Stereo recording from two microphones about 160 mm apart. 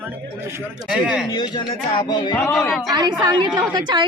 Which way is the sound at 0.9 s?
5° right (ahead or behind).